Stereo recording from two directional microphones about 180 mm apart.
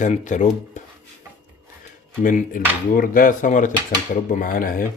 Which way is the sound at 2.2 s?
50° left (ahead or behind).